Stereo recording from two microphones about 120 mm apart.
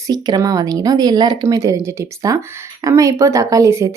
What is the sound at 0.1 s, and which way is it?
Speech, 30° right (ahead or behind).